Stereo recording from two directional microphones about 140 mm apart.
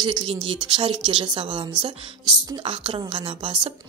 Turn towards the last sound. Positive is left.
turn(degrees=-35)  # may be behind; listen again after turning